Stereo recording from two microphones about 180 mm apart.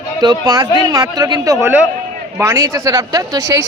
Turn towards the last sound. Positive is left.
turn(degrees=-20)  # may be behind; listen again after turning